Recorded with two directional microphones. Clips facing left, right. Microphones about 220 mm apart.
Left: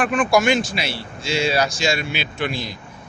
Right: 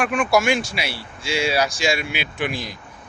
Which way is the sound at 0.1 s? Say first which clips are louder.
Left 2 dB; 5° right (ahead or behind).